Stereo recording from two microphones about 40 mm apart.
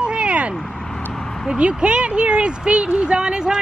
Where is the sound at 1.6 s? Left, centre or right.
Right.